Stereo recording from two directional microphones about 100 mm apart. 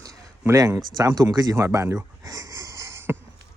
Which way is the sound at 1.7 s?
35° right (ahead or behind).